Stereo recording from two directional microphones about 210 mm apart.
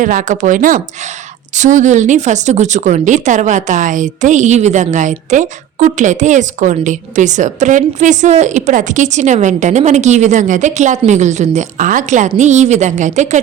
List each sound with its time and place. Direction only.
0.0 s a woman's voice: 40° right (ahead or behind)